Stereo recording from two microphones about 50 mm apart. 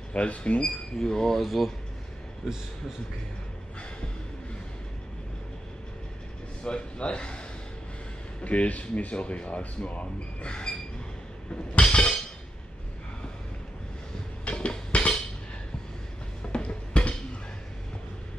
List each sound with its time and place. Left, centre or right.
0.1 s speech: left
0.9 s speech: centre
6.6 s speech: left
11.7 s music: left
14.4 s a sound: left
16.5 s a sound: left